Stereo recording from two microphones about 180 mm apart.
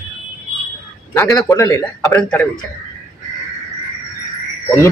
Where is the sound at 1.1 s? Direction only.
15° left (ahead or behind).